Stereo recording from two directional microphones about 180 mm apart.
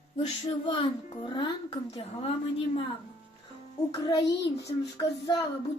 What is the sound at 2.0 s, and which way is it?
Speech, 30° left (ahead or behind).